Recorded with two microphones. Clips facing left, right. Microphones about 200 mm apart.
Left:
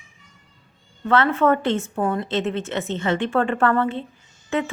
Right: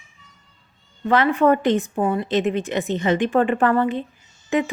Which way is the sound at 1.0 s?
15° right (ahead or behind).